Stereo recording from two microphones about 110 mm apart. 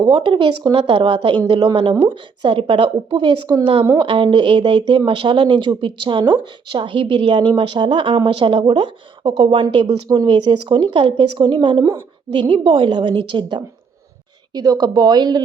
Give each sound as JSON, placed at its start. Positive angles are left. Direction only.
{"t": 0.0, "sound": "speech", "side_deg": -45}
{"t": 14.5, "sound": "speech", "side_deg": -35}